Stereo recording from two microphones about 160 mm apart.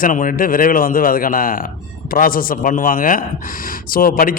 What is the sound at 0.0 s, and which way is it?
A man's voice, 55° left (ahead or behind).